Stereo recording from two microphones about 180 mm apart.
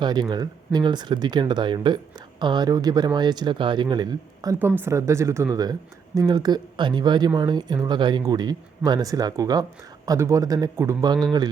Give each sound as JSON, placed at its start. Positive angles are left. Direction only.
{"t": 0.0, "sound": "speech", "side_deg": -25}